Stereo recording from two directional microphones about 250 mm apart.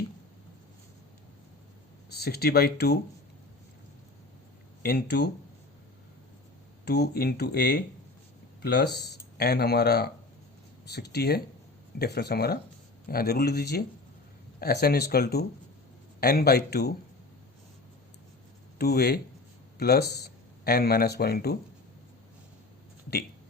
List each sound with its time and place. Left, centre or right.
2.1 s speech: left
4.8 s speech: left
6.8 s speech: left
18.8 s speech: left